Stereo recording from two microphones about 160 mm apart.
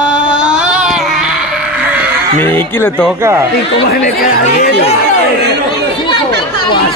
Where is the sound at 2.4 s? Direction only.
15° left (ahead or behind).